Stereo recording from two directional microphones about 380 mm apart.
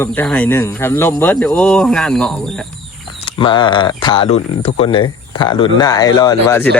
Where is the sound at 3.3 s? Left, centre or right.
Centre.